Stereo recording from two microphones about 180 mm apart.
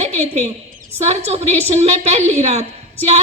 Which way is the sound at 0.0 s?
35° right (ahead or behind).